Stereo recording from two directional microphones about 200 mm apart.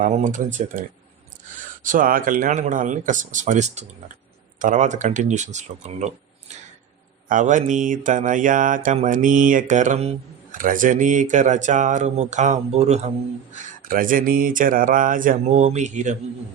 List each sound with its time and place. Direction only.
0.0 s mantra: 40° right (ahead or behind)
7.3 s mantra: 40° right (ahead or behind)